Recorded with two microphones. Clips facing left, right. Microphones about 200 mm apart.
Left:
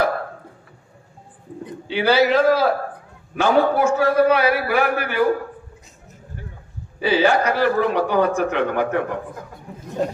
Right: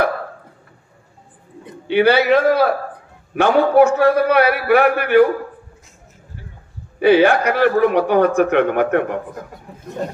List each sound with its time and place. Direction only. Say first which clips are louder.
1.9 s a man's voice: right 4 dB; 60° right (ahead or behind)
7.0 s a man's voice: right 5 dB; 60° right (ahead or behind)